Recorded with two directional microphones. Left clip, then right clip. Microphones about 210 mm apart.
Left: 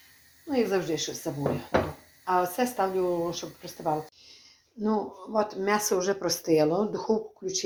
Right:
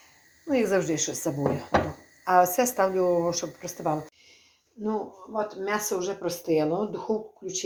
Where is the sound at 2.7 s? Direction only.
30° right (ahead or behind).